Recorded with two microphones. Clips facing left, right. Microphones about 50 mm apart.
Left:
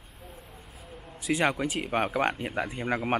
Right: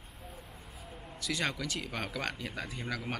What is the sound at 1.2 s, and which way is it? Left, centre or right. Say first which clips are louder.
Speech: left 8 dB; left.